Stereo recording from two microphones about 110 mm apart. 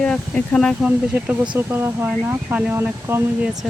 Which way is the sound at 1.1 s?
20° right (ahead or behind).